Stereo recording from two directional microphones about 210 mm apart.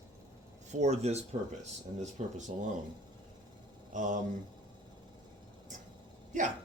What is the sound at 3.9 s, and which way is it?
Speech, 40° right (ahead or behind).